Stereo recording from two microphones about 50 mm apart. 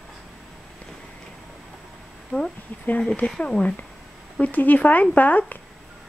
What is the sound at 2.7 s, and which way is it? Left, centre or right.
Speech, left.